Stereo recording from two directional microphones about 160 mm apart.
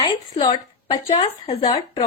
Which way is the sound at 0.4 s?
35° left (ahead or behind).